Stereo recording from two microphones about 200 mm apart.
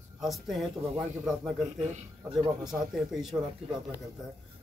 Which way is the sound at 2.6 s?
Centre (ahead or behind).